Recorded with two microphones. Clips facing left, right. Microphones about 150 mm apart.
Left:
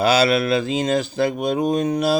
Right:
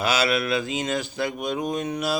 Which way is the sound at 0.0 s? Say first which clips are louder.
Left 6 dB; 35° left (ahead or behind).